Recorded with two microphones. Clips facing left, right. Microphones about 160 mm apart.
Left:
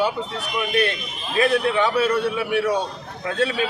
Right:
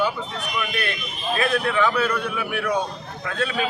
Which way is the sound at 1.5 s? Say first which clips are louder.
Left 2 dB; 30° left (ahead or behind).